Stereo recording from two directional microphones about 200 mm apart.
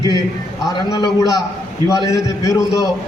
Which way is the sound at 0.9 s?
20° left (ahead or behind).